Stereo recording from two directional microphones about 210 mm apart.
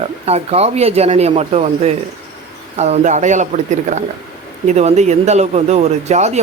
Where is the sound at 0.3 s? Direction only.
30° right (ahead or behind).